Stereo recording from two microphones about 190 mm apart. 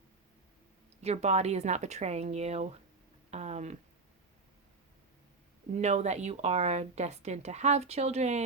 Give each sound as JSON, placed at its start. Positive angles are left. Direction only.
{"t": 1.0, "sound": "speech", "side_deg": -35}
{"t": 5.8, "sound": "speech", "side_deg": -35}